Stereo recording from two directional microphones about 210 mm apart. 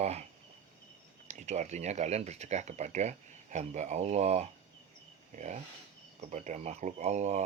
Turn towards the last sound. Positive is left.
turn(degrees=-35)  # may be behind; listen again after turning